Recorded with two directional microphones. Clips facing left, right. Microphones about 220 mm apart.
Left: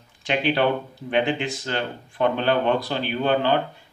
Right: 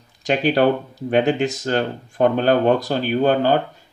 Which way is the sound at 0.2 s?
40° right (ahead or behind).